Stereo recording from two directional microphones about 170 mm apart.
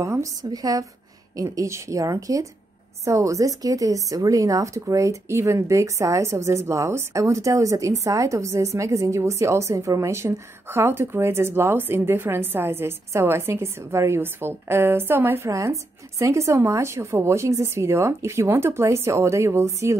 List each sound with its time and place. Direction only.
0.0 s a woman's voice: 20° right (ahead or behind)